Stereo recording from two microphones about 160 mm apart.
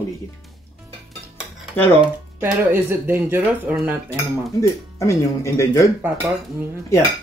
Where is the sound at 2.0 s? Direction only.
10° right (ahead or behind).